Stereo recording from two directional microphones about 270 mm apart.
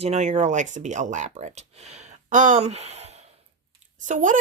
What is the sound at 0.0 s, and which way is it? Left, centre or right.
Speech, right.